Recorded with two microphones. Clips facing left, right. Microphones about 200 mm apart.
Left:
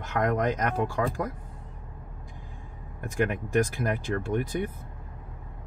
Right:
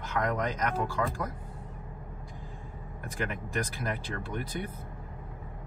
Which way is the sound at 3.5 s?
45° left (ahead or behind).